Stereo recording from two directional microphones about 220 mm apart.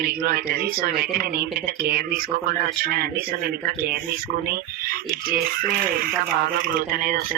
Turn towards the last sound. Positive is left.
turn(degrees=-40)  # may be behind; listen again after turning